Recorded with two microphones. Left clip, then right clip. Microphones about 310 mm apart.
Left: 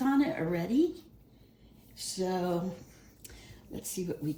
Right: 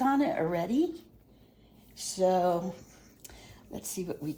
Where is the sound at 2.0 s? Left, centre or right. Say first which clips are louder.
Right 7 dB; right.